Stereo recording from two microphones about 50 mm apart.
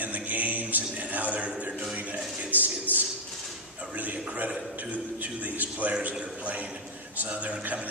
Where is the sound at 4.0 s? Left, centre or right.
Right.